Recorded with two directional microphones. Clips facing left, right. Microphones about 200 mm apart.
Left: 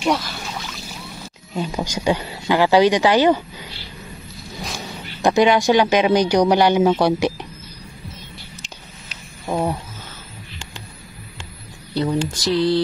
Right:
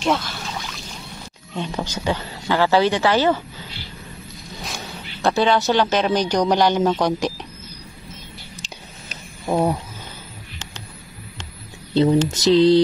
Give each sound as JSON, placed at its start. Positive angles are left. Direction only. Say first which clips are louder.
{"t": 0.0, "sound": "speech", "louder": "left 1 dB", "side_deg": 0}
{"t": 1.5, "sound": "a man's voice", "louder": "left 2 dB", "side_deg": 10}
{"t": 4.6, "sound": "a sound", "louder": "left 3 dB", "side_deg": 0}
{"t": 5.2, "sound": "a man's voice", "louder": "left 3 dB", "side_deg": 15}
{"t": 9.5, "sound": "a sound", "louder": "right 2 dB", "side_deg": -10}
{"t": 11.9, "sound": "speech", "louder": "right 5 dB", "side_deg": -25}